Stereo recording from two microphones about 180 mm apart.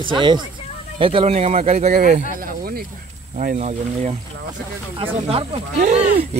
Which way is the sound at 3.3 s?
40° right (ahead or behind).